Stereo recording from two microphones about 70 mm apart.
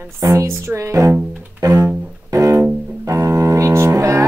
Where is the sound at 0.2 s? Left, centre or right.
Right.